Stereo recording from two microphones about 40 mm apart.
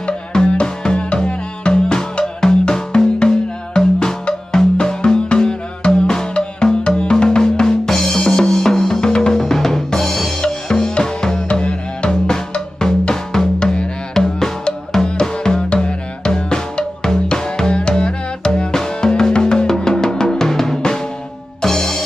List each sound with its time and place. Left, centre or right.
0.3 s music: left
4.5 s music: centre
7.9 s drum: centre
9.4 s drum kit: centre
10.4 s drum: centre
11.6 s music: left
12.3 s drum: centre
21.6 s music: centre